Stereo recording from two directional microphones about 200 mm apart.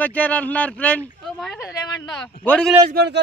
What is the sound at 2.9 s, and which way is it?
Speech, 55° right (ahead or behind).